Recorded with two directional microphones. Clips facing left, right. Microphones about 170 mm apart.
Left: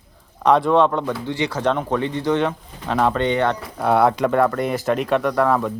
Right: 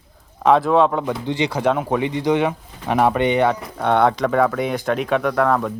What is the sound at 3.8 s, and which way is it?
A man's voice, 5° left (ahead or behind).